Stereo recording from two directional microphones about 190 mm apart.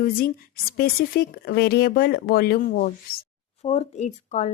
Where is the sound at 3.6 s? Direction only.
35° left (ahead or behind).